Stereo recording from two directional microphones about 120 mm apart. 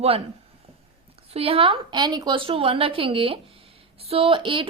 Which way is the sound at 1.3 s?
50° right (ahead or behind).